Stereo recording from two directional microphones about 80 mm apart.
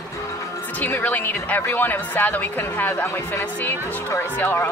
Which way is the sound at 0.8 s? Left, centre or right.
Left.